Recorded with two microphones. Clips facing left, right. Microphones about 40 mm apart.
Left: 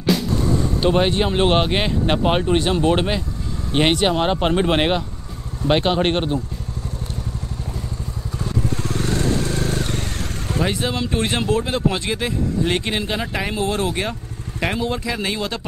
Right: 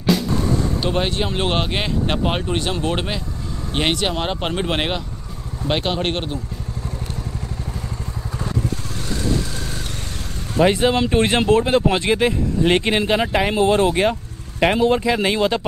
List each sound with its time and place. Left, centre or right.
0.1 s a sound: centre
0.7 s speech: centre
8.8 s vehicle: left
10.6 s speech: right